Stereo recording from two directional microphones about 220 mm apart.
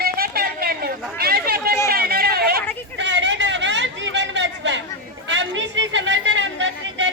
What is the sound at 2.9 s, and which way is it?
Chatter, 55° right (ahead or behind).